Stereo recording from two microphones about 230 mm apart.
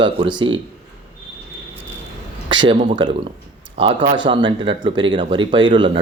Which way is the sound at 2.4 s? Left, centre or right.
Right.